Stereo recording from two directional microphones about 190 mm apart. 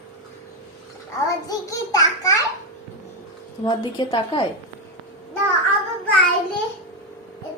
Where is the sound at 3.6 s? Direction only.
20° left (ahead or behind).